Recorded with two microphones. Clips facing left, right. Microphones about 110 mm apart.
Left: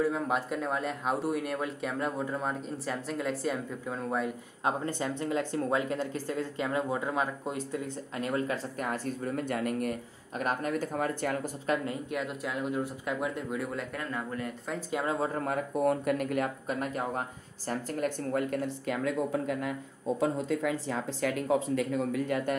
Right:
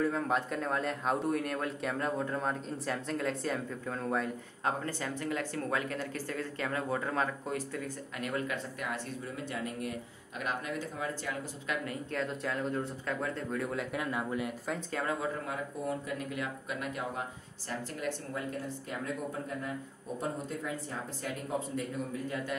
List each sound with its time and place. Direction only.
0.0 s speech: 5° left (ahead or behind)
4.6 s speech: 20° left (ahead or behind)
8.2 s speech: 30° left (ahead or behind); by 9.9 s 55° left (ahead or behind)
10.4 s speech: 45° left (ahead or behind)
12.1 s speech: 10° left (ahead or behind); by 14.8 s 10° right (ahead or behind)
14.9 s speech: 15° left (ahead or behind)
15.1 s speech: 40° left (ahead or behind)
17.6 s speech: 55° left (ahead or behind); by 22.4 s 90° left